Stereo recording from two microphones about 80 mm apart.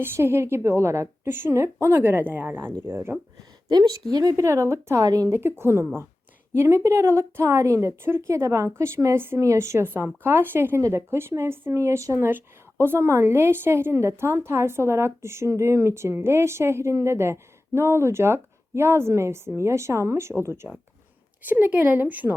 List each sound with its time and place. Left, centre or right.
0.0 s a woman's voice: right
3.7 s speech: right
5.0 s speech: right
5.3 s a woman's voice: right